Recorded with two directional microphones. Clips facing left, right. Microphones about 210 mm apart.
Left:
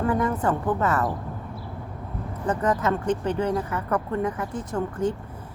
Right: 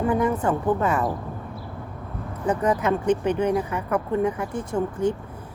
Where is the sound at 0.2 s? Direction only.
10° right (ahead or behind).